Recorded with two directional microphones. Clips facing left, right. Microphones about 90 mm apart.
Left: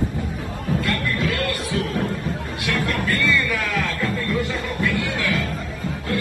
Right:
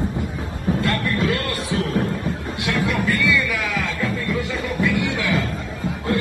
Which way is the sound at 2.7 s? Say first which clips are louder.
Right 2 dB; 10° right (ahead or behind).